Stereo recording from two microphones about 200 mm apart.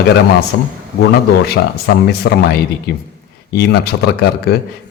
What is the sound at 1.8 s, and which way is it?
A man's voice, 50° left (ahead or behind).